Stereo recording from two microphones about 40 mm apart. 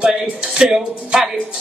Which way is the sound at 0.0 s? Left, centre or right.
Centre.